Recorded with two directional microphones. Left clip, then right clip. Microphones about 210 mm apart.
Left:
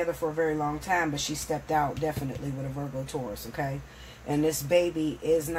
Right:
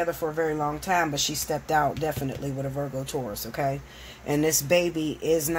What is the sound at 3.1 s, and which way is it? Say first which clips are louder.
Speech: right 3 dB; 40° right (ahead or behind).